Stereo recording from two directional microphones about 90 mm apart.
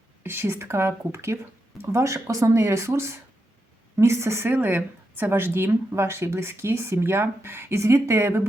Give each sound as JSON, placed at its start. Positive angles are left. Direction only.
{"t": 0.2, "sound": "a woman's voice", "side_deg": -25}